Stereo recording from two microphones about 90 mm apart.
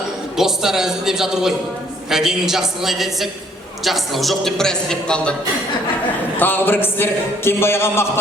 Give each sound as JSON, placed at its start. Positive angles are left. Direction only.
{"t": 0.3, "sound": "a man's voice", "side_deg": -5}
{"t": 6.3, "sound": "a man's voice", "side_deg": 20}